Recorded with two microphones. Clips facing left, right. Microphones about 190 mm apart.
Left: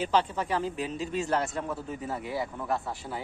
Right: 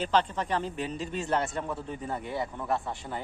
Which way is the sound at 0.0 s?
10° left (ahead or behind).